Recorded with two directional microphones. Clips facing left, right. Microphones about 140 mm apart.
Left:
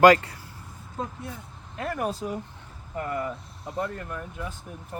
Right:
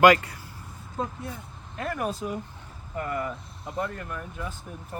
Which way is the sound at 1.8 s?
35° left (ahead or behind).